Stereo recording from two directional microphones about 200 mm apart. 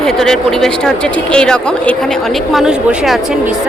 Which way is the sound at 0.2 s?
Centre (ahead or behind).